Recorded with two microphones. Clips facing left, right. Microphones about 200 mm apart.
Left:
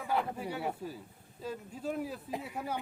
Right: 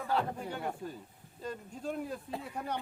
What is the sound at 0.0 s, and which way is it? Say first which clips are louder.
Speech: even; 15° left (ahead or behind).